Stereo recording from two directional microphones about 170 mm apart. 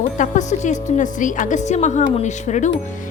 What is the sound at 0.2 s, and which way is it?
A woman's voice, 45° left (ahead or behind).